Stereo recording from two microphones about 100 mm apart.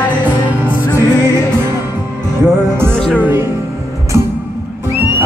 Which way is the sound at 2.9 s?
10° left (ahead or behind).